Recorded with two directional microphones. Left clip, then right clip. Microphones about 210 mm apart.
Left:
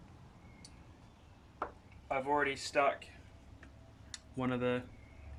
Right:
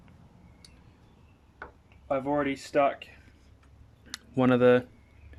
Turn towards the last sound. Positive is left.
turn(degrees=-55)  # may be behind; listen again after turning